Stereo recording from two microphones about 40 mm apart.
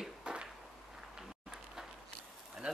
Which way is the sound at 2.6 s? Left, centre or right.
Right.